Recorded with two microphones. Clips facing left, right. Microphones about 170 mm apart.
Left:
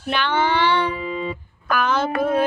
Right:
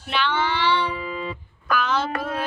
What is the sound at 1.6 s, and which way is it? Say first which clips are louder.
Speech: left 3 dB; 50° left (ahead or behind).